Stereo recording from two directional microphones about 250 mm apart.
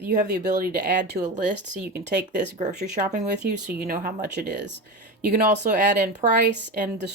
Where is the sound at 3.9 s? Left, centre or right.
Right.